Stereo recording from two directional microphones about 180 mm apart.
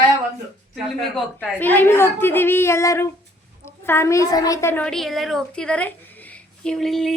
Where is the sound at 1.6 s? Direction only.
10° left (ahead or behind).